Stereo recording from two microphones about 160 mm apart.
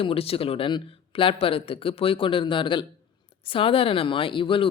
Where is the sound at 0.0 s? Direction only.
35° left (ahead or behind).